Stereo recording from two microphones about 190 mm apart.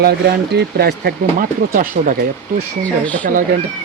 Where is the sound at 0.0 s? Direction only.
55° right (ahead or behind).